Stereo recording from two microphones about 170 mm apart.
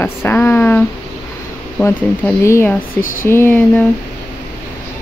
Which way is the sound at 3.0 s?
50° left (ahead or behind).